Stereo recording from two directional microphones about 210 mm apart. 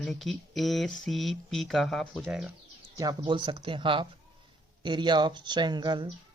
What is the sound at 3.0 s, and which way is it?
Speech, 20° right (ahead or behind).